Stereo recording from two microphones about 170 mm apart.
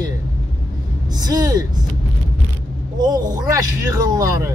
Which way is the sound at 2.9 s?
25° right (ahead or behind).